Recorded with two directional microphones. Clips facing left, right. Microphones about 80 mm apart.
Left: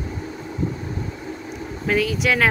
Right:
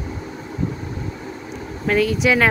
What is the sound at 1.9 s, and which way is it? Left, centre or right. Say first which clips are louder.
Speech: right 3 dB; centre.